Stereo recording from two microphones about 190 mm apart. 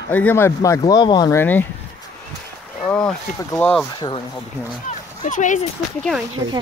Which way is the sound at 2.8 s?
5° left (ahead or behind).